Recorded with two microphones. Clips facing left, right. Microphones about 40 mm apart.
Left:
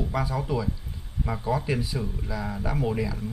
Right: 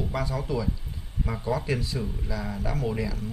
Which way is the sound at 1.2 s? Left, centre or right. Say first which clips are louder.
Left 1 dB; centre.